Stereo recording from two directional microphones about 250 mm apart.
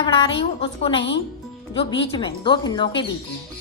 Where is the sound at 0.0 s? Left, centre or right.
Left.